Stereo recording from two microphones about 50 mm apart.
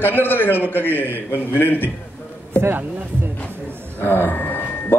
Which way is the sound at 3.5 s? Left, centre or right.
Right.